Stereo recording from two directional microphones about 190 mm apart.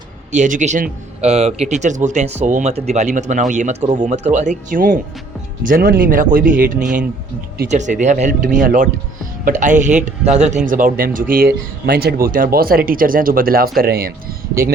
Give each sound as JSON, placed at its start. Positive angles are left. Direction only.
{"t": 0.3, "sound": "speech", "side_deg": -40}